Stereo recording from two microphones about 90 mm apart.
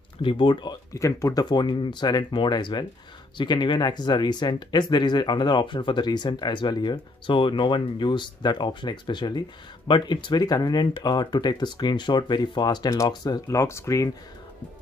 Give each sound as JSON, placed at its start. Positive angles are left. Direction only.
{"t": 0.2, "sound": "speech", "side_deg": 70}
{"t": 0.9, "sound": "speech", "side_deg": 35}
{"t": 1.4, "sound": "speech", "side_deg": 55}